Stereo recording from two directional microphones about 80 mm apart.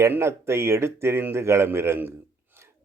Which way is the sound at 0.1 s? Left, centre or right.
Right.